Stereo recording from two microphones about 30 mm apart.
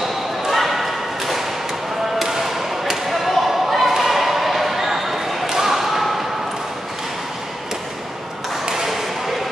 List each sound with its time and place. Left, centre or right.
0.5 s basketball bounce: centre
8.6 s ping: centre